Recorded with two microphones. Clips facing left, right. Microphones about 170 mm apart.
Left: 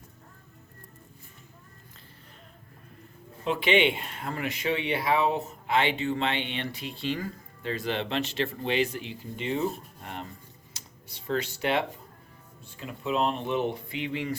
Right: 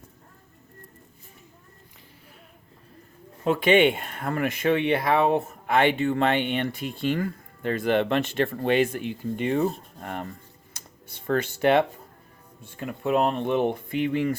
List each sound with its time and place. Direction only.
3.4 s speech: 45° right (ahead or behind)